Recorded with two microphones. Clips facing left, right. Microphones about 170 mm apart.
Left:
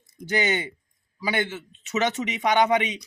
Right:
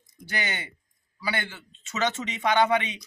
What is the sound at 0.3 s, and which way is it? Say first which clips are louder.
A man's voice: left 8 dB; 20° left (ahead or behind).